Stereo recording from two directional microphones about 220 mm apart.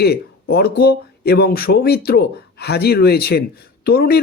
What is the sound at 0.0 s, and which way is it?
Speech, 45° left (ahead or behind).